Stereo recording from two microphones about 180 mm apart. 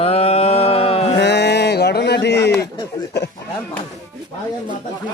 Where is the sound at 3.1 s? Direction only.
65° left (ahead or behind).